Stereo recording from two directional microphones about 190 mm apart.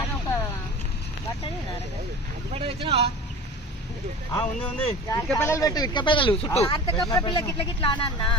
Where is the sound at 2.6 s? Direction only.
30° right (ahead or behind).